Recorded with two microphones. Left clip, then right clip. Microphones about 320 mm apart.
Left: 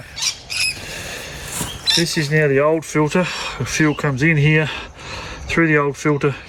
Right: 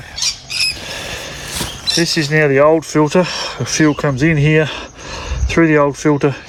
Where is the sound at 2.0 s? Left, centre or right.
Centre.